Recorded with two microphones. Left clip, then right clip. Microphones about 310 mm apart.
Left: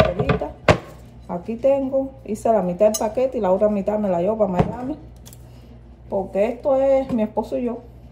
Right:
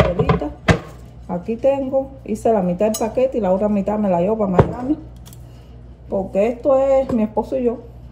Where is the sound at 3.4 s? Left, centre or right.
Left.